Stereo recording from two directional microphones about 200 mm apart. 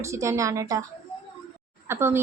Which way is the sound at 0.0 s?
15° right (ahead or behind).